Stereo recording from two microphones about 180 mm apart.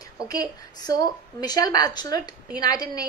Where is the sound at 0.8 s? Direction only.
20° left (ahead or behind).